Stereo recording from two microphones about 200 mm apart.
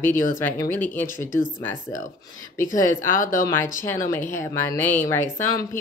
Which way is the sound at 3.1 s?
45° left (ahead or behind).